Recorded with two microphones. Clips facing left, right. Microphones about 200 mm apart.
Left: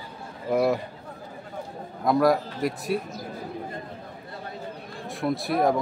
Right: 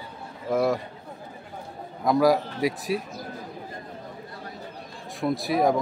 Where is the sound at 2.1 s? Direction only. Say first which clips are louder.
Right 1 dB; centre (ahead or behind).